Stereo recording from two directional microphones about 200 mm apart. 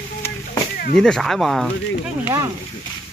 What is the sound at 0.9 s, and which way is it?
Speech, centre (ahead or behind).